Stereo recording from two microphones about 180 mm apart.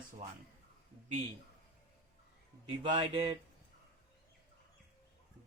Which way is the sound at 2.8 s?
25° right (ahead or behind).